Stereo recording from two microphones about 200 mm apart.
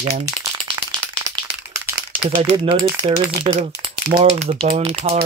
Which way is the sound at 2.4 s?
25° right (ahead or behind).